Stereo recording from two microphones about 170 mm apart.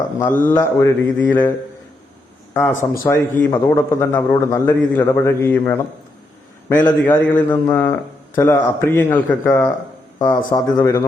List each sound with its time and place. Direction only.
0.2 s a man's voice: 10° left (ahead or behind)
7.0 s a man's voice: 10° left (ahead or behind)